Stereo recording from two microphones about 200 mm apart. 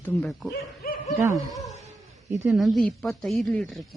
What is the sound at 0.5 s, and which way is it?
Speech, 50° left (ahead or behind).